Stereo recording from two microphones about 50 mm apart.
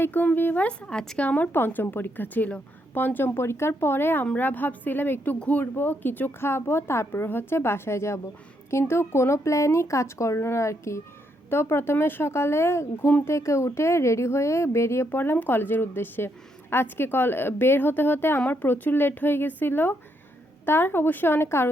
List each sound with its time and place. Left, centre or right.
0.0 s a woman's voice: left
0.6 s speech: left
1.5 s a woman's voice: left
3.2 s a woman's voice: left
8.9 s speech: left
11.4 s speech: left
15.1 s a woman's voice: left